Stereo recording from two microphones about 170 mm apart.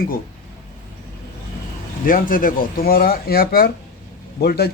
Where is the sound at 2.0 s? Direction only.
55° left (ahead or behind).